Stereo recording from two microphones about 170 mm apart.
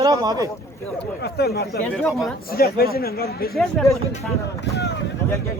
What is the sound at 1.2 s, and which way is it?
Speech, 70° left (ahead or behind).